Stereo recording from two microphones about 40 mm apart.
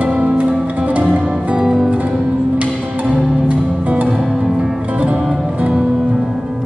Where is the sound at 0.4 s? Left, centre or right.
Right.